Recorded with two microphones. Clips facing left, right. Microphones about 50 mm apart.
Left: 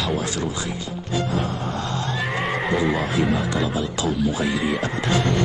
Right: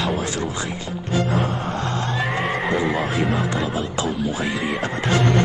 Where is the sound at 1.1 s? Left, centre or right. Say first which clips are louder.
Right 3 dB; right.